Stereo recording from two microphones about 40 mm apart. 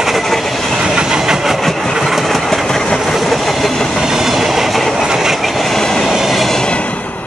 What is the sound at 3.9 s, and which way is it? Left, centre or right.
Train, centre.